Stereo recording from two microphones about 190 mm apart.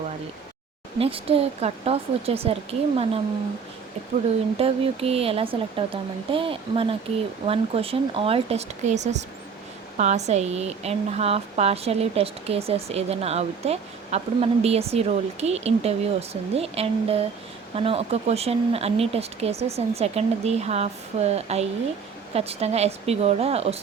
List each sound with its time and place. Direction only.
0.9 s speech: 30° right (ahead or behind)
4.5 s speech: 30° right (ahead or behind)